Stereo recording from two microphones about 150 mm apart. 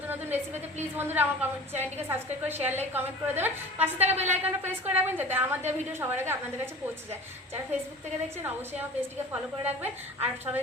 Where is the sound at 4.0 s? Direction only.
45° right (ahead or behind).